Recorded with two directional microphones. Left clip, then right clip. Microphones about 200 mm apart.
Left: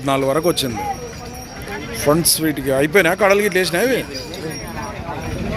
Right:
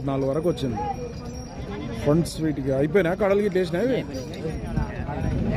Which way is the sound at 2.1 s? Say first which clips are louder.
Left 7 dB; 10° left (ahead or behind).